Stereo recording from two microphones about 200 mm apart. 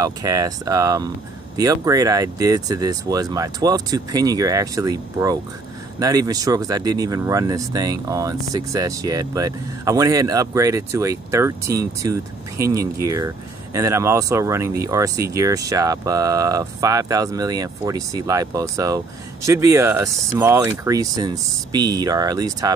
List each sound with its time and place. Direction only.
0.0 s speech: 15° right (ahead or behind)